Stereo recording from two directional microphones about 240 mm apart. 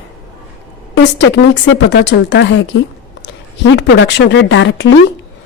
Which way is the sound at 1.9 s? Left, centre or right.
Left.